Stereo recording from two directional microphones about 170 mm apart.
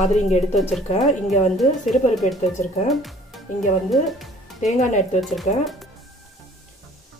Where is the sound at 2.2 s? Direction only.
45° left (ahead or behind).